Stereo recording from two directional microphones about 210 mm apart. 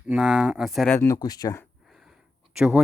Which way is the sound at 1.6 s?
Centre (ahead or behind).